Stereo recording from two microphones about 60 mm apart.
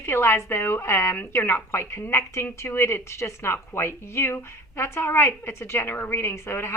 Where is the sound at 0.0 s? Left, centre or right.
Left.